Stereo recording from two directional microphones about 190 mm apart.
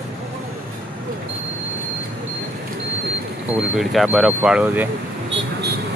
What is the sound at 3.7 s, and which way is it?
Speech, centre (ahead or behind).